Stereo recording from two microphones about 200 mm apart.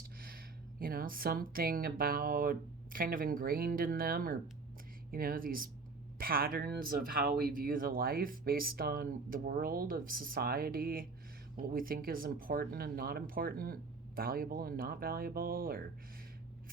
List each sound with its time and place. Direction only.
0.2 s a woman's voice: 45° right (ahead or behind)